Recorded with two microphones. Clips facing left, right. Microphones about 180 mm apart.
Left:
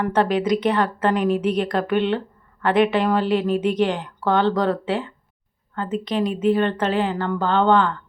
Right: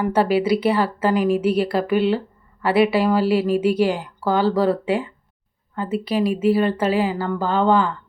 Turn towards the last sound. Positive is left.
turn(degrees=-5)  # may be behind; listen again after turning